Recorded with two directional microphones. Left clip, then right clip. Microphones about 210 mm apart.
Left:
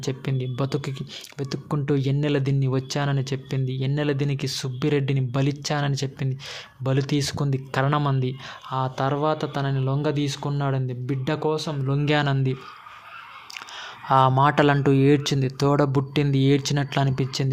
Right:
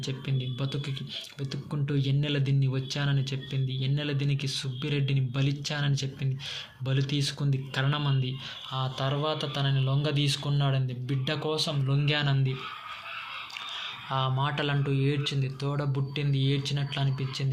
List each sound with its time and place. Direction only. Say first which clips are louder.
0.0 s speech: left 6 dB; 55° left (ahead or behind)
14.1 s speech: left 13 dB; 55° left (ahead or behind)